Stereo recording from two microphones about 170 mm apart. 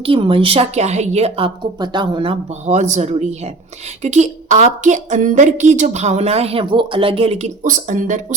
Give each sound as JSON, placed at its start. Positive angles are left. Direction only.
{"t": 0.0, "sound": "a woman's voice", "side_deg": -30}